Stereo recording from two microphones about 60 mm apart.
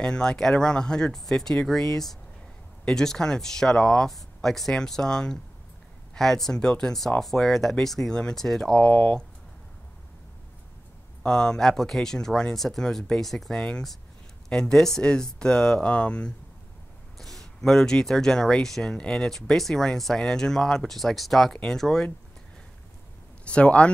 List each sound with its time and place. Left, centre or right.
0.0 s speech: centre
11.2 s speech: centre
13.5 s speech: centre
17.2 s speech: centre
23.4 s speech: centre